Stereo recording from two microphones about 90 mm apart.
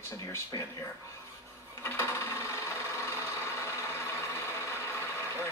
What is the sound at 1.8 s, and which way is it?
Sewing machine, 30° left (ahead or behind).